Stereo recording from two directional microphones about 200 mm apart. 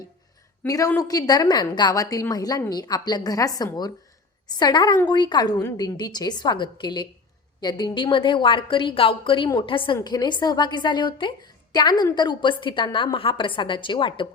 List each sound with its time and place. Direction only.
0.6 s a woman's voice: 15° left (ahead or behind)